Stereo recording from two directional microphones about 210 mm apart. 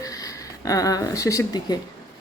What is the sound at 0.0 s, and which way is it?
Speech, 15° left (ahead or behind).